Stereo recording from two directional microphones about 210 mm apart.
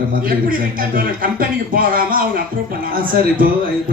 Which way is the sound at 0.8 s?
40° right (ahead or behind).